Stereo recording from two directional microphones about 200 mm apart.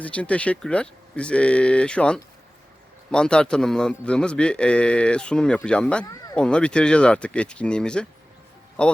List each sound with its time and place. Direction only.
0.0 s a man's voice: 5° left (ahead or behind)